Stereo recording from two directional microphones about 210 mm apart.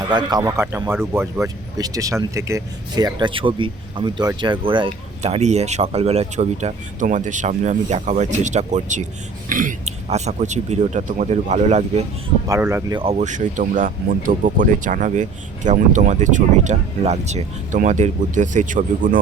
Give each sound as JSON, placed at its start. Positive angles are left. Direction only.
{"t": 0.1, "sound": "speech", "side_deg": -20}
{"t": 12.5, "sound": "speech", "side_deg": -15}